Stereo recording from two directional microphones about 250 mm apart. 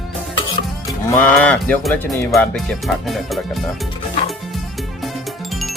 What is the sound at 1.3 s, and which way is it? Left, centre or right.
Speech, centre.